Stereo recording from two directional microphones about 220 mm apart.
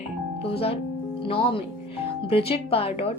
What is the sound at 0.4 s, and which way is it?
Speech, 25° left (ahead or behind).